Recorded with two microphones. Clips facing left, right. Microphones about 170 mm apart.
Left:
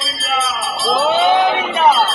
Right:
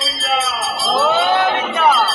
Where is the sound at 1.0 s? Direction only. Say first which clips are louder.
Left 2 dB; 20° left (ahead or behind).